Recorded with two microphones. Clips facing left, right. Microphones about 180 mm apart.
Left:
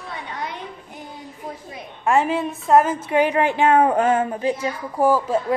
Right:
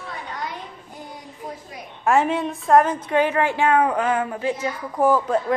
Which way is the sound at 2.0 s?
Centre (ahead or behind).